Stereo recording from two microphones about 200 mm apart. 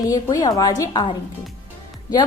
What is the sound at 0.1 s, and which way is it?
A woman's voice, 20° left (ahead or behind).